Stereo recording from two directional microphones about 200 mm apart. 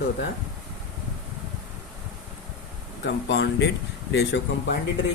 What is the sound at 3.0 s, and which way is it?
Speech, 60° left (ahead or behind).